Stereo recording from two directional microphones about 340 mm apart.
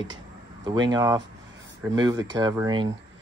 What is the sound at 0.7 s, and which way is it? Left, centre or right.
Speech, centre.